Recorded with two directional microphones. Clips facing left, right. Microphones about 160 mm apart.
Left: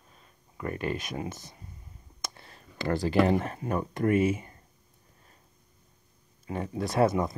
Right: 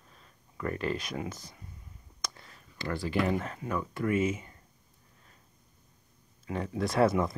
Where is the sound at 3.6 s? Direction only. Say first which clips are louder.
Left 3 dB; 40° left (ahead or behind).